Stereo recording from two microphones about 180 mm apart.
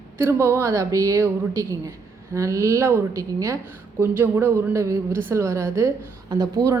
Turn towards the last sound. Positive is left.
turn(degrees=-20)  # may be behind; listen again after turning